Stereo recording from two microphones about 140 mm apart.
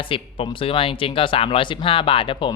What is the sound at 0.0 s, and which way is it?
Speech, 40° left (ahead or behind).